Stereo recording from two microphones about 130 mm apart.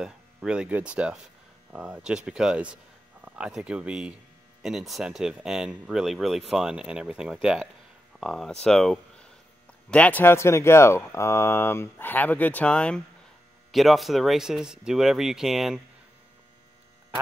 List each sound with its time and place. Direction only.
0.0 s speech: 5° right (ahead or behind)